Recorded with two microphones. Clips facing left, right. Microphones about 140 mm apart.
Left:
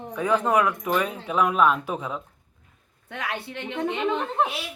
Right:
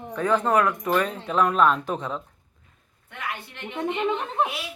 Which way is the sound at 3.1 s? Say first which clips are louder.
Left 3 dB; 90° left.